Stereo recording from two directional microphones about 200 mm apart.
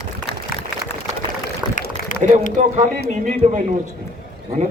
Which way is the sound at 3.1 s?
35° right (ahead or behind).